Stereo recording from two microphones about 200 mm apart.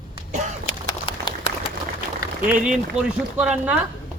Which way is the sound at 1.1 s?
30° left (ahead or behind).